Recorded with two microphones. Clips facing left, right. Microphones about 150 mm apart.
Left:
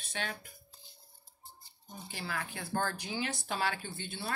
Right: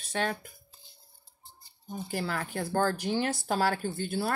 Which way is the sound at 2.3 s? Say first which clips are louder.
Right 5 dB; 40° right (ahead or behind).